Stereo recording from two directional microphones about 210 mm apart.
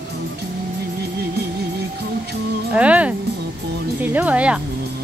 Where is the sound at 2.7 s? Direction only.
5° right (ahead or behind).